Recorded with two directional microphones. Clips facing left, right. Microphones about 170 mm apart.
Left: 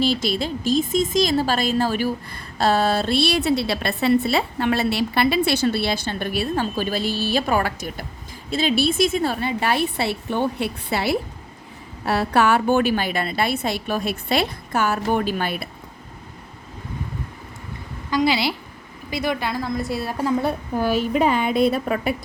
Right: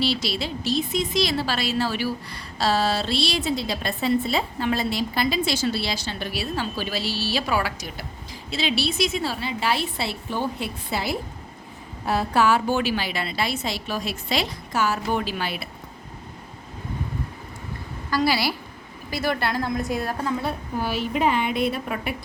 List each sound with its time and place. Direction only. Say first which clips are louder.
0.0 s a woman's voice: left 4 dB; 50° left (ahead or behind)
18.1 s a woman's voice: left 2 dB; 20° left (ahead or behind)
19.2 s a woman's voice: even; centre (ahead or behind)
20.4 s a woman's voice: left 5 dB; 45° left (ahead or behind)